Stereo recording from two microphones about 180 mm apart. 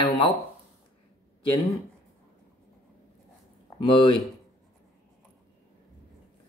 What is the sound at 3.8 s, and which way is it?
Speech, 30° left (ahead or behind).